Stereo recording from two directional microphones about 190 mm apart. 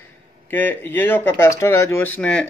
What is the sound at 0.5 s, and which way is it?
Speech, 10° left (ahead or behind).